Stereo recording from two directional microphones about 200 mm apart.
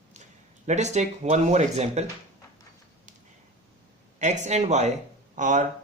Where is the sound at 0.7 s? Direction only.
35° right (ahead or behind).